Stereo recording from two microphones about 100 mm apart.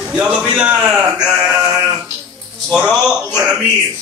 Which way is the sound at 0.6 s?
10° right (ahead or behind).